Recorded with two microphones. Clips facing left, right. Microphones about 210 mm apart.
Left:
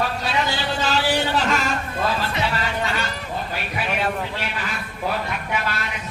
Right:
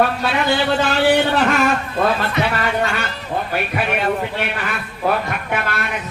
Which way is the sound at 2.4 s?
60° right (ahead or behind).